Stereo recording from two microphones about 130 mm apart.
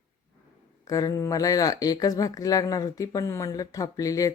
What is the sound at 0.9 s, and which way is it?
Speech, 25° left (ahead or behind).